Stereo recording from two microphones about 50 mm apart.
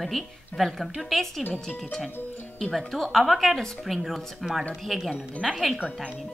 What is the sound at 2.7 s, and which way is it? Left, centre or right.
Speech, centre.